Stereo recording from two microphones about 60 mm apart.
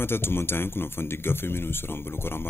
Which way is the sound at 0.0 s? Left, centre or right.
Left.